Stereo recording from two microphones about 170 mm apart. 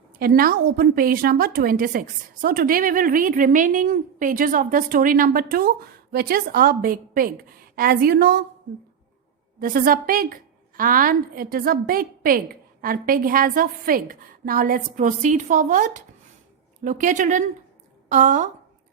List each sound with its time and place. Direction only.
0.2 s a woman's voice: 60° right (ahead or behind)
9.6 s a woman's voice: 55° right (ahead or behind)